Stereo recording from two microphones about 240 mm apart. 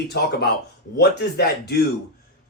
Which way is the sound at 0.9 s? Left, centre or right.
Left.